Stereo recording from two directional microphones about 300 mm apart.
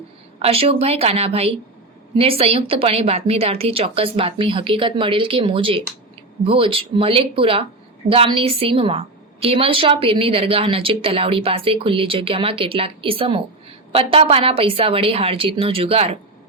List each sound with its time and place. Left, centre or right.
0.3 s a woman's voice: centre